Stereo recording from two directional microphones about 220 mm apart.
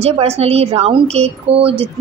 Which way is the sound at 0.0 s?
30° right (ahead or behind).